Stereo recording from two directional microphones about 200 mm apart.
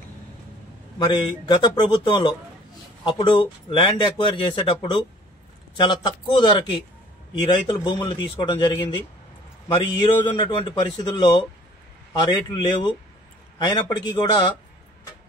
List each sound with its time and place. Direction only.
0.9 s speech: 20° left (ahead or behind)